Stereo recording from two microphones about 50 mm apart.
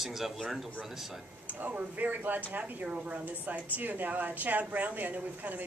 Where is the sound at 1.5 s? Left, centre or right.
Right.